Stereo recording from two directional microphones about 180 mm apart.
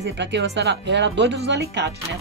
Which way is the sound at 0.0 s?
75° right (ahead or behind).